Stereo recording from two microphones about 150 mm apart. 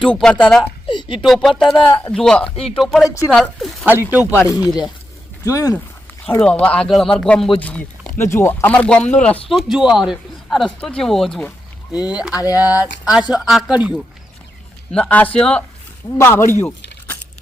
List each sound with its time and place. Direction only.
0.0 s speech: 5° left (ahead or behind)
0.9 s a sound: 30° left (ahead or behind)
1.2 s speech: centre (ahead or behind)
1.9 s speech: 15° left (ahead or behind)
2.1 s speech: 5° left (ahead or behind)
4.1 s speech: 10° right (ahead or behind)
4.4 s speech: 25° left (ahead or behind)
6.2 s speech: 10° left (ahead or behind)
8.2 s speech: 15° left (ahead or behind)
11.9 s speech: 5° right (ahead or behind)
12.3 s speech: 20° left (ahead or behind)
12.6 s speech: 10° right (ahead or behind)
14.9 s speech: 10° left (ahead or behind)
16.0 s speech: 20° left (ahead or behind)